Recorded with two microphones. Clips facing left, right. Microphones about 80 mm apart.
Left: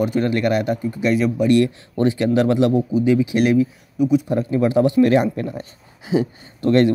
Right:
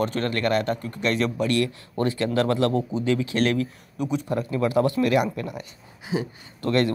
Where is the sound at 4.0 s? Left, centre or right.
Centre.